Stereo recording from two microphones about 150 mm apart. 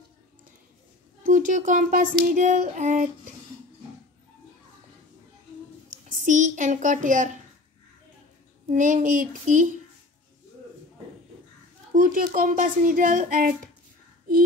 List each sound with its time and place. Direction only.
1.2 s speech: 60° right (ahead or behind)
6.2 s speech: 55° right (ahead or behind)
8.7 s speech: 60° right (ahead or behind)
11.9 s speech: 65° right (ahead or behind)